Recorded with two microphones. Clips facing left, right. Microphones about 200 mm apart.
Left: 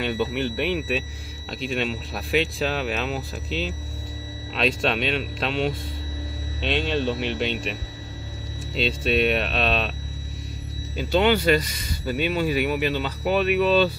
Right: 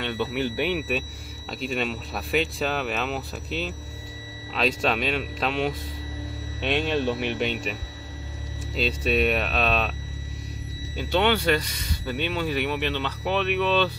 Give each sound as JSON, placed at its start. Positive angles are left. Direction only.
{"t": 0.0, "sound": "speech", "side_deg": 10}
{"t": 0.3, "sound": "a man's voice", "side_deg": -5}
{"t": 3.4, "sound": "speech", "side_deg": 30}
{"t": 4.6, "sound": "a man's voice", "side_deg": 0}
{"t": 9.0, "sound": "a man's voice", "side_deg": 0}
{"t": 11.0, "sound": "speech", "side_deg": 5}